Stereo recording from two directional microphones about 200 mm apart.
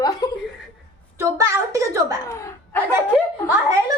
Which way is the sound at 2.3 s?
15° left (ahead or behind).